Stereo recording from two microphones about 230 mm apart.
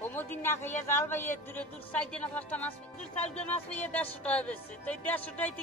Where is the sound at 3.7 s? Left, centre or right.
Centre.